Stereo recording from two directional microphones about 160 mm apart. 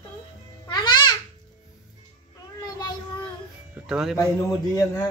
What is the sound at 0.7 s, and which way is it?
Babbling, 25° left (ahead or behind).